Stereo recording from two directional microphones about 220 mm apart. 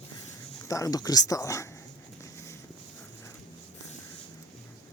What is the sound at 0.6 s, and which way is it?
Speech, 15° left (ahead or behind).